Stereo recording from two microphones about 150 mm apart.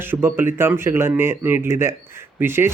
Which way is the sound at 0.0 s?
15° right (ahead or behind).